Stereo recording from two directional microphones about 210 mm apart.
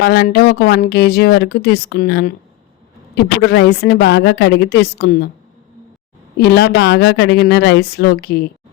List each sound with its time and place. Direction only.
0.0 s speech: 50° left (ahead or behind)
3.4 s speech: 50° left (ahead or behind)
6.4 s speech: 50° left (ahead or behind)